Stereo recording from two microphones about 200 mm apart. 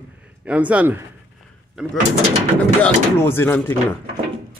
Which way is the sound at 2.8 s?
10° left (ahead or behind).